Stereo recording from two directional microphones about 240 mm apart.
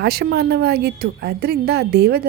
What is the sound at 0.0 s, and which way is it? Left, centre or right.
A woman's voice, right.